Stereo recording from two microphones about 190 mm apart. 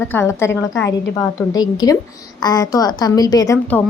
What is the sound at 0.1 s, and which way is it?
A woman's voice, 15° left (ahead or behind).